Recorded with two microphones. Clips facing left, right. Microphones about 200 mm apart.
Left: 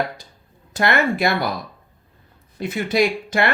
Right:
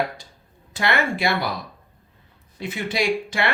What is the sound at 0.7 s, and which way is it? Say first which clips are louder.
Speech: left 4 dB; 40° left (ahead or behind).